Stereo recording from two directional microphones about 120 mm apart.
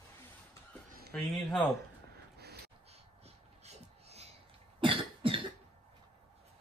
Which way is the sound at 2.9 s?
65° right (ahead or behind).